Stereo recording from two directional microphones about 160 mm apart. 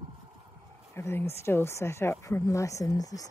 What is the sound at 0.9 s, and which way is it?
Speech, 15° left (ahead or behind).